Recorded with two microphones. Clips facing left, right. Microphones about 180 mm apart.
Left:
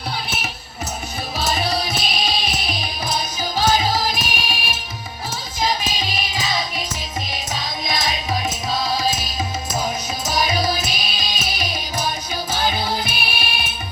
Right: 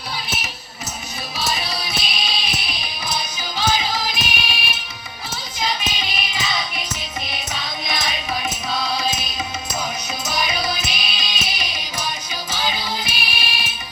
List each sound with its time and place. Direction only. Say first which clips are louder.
1.4 s music: left 4 dB; 50° left (ahead or behind)
10.2 s music: left 4 dB; 45° left (ahead or behind)